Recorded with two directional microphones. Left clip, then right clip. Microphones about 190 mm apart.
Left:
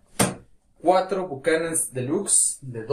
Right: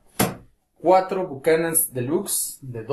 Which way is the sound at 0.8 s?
45° right (ahead or behind).